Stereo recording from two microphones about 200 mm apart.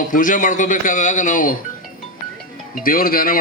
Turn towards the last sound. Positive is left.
turn(degrees=45)  # may be behind; listen again after turning